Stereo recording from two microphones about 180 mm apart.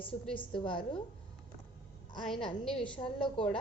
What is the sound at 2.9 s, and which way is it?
Speech, 30° left (ahead or behind).